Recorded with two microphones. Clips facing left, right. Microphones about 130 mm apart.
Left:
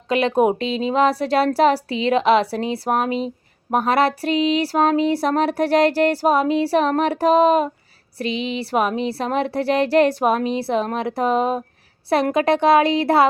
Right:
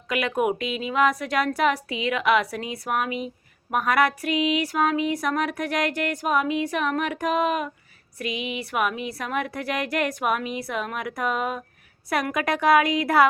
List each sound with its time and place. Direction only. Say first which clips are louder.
0.1 s a woman's voice: left 7 dB; 30° left (ahead or behind)